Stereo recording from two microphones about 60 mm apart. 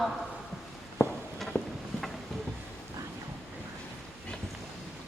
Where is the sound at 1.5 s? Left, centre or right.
Left.